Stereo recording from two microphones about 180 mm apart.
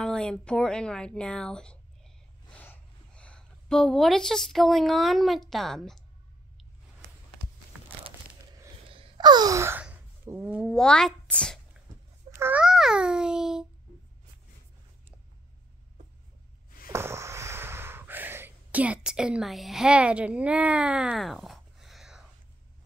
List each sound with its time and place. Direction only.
0.0 s speech: 5° left (ahead or behind)
8.8 s gasp: 30° right (ahead or behind); by 11.6 s 5° left (ahead or behind)
12.3 s a child's voice: 10° right (ahead or behind)
16.9 s a sound: 15° right (ahead or behind)